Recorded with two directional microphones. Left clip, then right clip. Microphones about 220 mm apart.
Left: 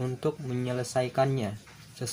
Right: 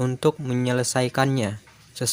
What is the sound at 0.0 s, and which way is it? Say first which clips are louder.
Speech: right 9 dB; 45° right (ahead or behind).